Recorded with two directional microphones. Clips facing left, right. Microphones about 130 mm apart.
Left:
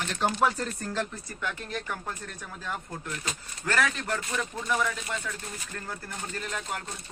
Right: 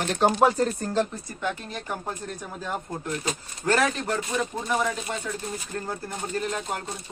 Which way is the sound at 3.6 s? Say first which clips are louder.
Right 5 dB; 30° right (ahead or behind).